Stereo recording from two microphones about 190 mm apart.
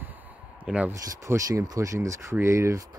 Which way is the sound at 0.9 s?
15° right (ahead or behind).